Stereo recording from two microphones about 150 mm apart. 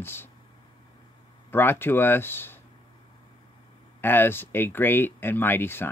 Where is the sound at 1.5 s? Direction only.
15° left (ahead or behind).